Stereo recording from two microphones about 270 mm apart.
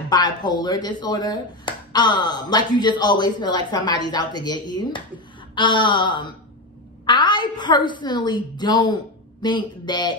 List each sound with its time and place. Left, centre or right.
0.1 s speech: centre